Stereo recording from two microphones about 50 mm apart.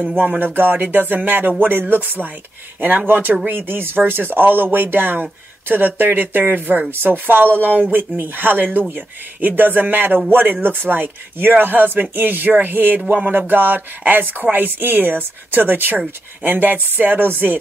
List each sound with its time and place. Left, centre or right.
0.2 s speech: right